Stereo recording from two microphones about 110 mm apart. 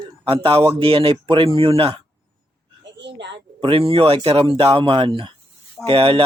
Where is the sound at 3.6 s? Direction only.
50° right (ahead or behind).